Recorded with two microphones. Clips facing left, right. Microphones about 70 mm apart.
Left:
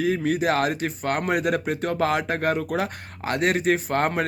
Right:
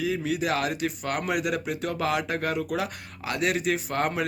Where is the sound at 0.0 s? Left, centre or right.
Left.